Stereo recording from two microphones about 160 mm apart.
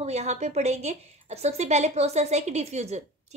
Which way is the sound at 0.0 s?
45° right (ahead or behind).